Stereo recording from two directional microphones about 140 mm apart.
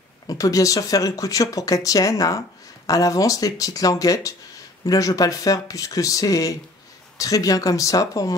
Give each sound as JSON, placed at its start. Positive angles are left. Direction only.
{"t": 0.3, "sound": "speech", "side_deg": 25}